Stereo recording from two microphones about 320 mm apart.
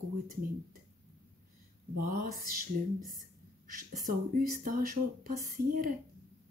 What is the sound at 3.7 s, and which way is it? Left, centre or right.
Speech, right.